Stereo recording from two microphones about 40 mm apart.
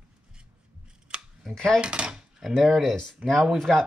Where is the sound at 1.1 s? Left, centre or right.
Right.